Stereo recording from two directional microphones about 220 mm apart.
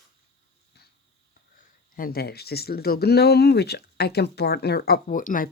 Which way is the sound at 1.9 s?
40° left (ahead or behind).